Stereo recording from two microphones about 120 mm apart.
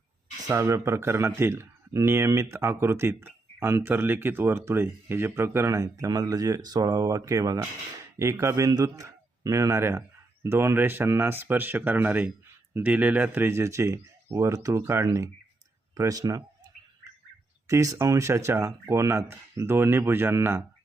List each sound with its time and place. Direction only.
0.4 s a man's voice: 25° right (ahead or behind)
17.7 s speech: 25° right (ahead or behind)